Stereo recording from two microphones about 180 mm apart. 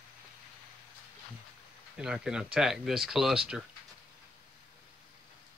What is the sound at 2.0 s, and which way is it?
Speech, 5° right (ahead or behind).